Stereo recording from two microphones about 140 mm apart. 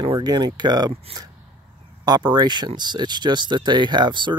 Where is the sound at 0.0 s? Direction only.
30° right (ahead or behind).